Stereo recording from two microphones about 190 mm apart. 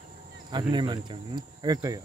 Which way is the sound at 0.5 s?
25° right (ahead or behind).